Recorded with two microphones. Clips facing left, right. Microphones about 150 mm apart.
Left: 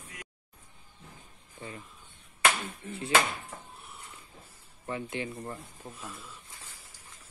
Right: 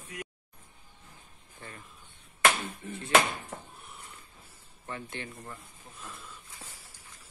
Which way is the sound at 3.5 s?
45° right (ahead or behind).